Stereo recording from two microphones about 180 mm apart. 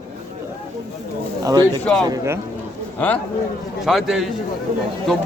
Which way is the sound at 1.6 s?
5° left (ahead or behind).